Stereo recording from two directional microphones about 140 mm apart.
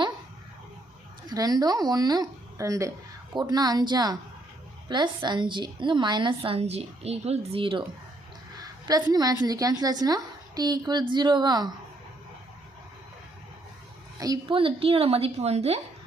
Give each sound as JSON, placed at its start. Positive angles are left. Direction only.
{"t": 1.3, "sound": "a woman's voice", "side_deg": -25}
{"t": 8.5, "sound": "a sound", "side_deg": -30}
{"t": 9.1, "sound": "a woman's voice", "side_deg": -25}
{"t": 14.2, "sound": "a woman's voice", "side_deg": -25}
{"t": 14.5, "sound": "a woman's voice", "side_deg": -40}